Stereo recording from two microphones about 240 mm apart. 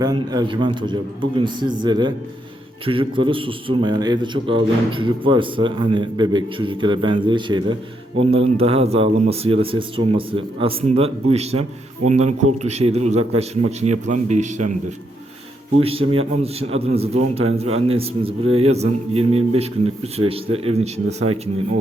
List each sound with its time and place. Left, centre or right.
0.0 s a man's voice: centre